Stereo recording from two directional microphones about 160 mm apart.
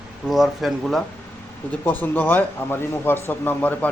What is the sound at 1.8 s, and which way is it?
A man's voice, 10° left (ahead or behind).